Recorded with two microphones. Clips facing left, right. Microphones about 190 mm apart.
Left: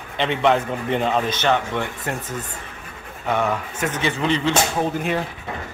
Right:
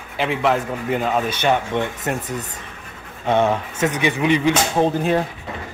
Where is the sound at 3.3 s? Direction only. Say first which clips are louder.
Right 4 dB; 25° right (ahead or behind).